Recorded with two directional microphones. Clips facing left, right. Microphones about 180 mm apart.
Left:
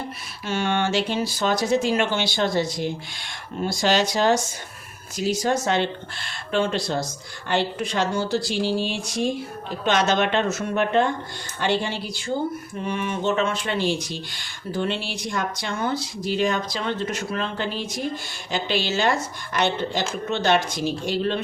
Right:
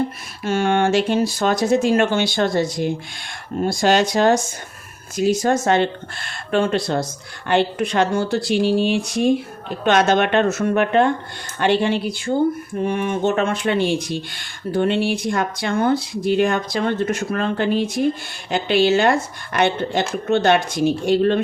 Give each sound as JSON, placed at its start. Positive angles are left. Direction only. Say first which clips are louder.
{"t": 0.4, "sound": "speech", "louder": "right 6 dB", "side_deg": -45}